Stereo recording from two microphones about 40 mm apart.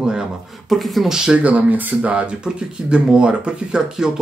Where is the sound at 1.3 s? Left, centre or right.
Right.